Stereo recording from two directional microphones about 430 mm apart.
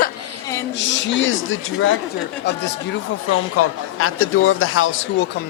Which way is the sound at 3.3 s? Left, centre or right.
Left.